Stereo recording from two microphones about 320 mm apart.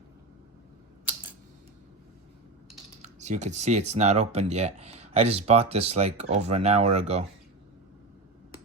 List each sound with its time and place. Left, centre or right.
3.0 s speech: right